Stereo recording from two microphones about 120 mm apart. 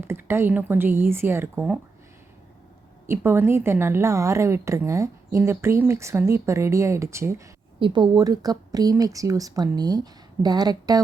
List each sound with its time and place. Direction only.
0.0 s speech: 20° right (ahead or behind)
3.1 s speech: 20° right (ahead or behind)
7.8 s speech: 40° right (ahead or behind)